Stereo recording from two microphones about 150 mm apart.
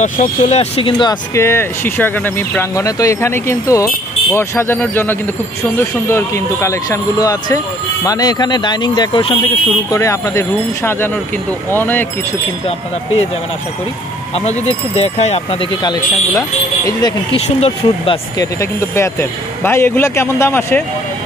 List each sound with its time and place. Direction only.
0.0 s speech: 55° left (ahead or behind); by 1.1 s 35° left (ahead or behind)
1.3 s speech: 15° left (ahead or behind); by 9.4 s 35° left (ahead or behind)
9.8 s speech: 20° left (ahead or behind)
14.3 s speech: 45° left (ahead or behind)
15.8 s speech: 25° left (ahead or behind)
17.3 s speech: 40° left (ahead or behind)
18.4 s speech: 20° left (ahead or behind)